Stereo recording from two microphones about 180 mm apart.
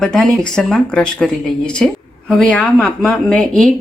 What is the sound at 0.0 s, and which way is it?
A woman's voice, centre (ahead or behind).